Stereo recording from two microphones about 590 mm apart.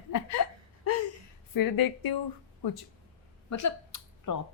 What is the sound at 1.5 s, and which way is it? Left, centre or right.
A woman's voice, left.